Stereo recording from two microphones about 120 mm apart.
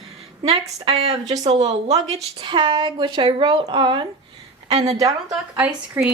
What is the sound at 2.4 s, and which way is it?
Speech, 40° right (ahead or behind).